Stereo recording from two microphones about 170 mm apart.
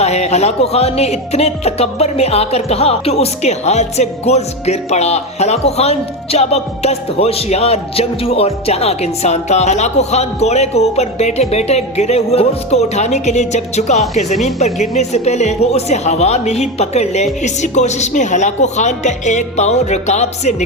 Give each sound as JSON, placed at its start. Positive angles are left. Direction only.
{"t": 0.0, "sound": "speech", "side_deg": 40}